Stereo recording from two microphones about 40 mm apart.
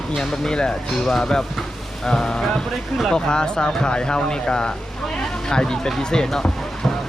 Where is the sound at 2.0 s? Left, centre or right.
Centre.